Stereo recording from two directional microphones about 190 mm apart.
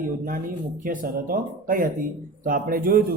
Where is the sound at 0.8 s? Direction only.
50° right (ahead or behind).